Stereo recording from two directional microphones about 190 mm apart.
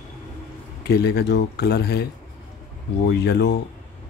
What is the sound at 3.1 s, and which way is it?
Speech, 60° left (ahead or behind).